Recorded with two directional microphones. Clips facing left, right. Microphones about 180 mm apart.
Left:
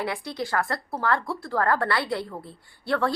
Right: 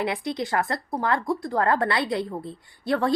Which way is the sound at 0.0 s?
20° right (ahead or behind).